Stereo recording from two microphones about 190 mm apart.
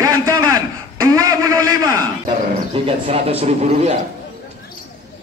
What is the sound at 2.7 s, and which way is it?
A man's voice, 30° right (ahead or behind).